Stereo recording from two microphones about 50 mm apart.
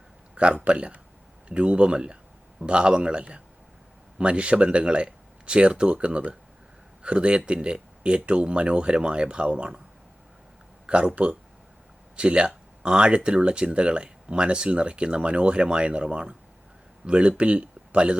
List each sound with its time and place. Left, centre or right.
0.3 s speech: right
10.8 s speech: right